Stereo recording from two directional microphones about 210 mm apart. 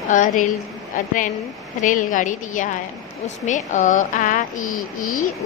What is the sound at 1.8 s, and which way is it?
A woman's voice, 40° left (ahead or behind).